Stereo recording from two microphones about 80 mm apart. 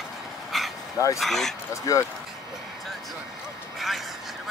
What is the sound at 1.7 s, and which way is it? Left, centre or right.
Speech, left.